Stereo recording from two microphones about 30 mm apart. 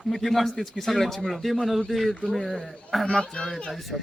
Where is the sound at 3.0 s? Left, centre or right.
Left.